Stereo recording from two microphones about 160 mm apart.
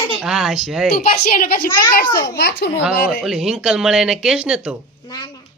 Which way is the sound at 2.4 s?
90° left.